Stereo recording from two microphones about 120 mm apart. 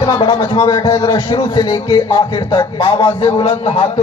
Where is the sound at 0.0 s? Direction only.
45° left (ahead or behind); by 2.6 s 30° left (ahead or behind).